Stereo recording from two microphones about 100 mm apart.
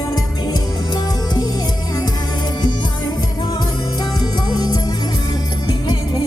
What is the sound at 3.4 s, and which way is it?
Music, 45° left (ahead or behind).